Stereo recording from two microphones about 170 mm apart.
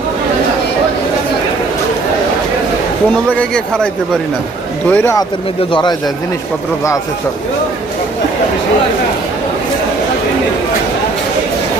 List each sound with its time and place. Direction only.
3.2 s speech: 5° left (ahead or behind)
4.9 s speech: 15° left (ahead or behind)